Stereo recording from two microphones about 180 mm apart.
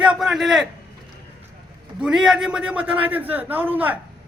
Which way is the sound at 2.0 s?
5° right (ahead or behind).